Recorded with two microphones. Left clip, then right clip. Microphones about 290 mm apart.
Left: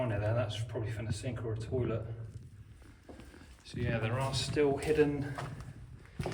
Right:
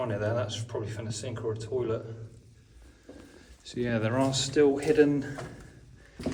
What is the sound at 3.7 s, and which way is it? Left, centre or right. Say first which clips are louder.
Speech: right 7 dB; centre.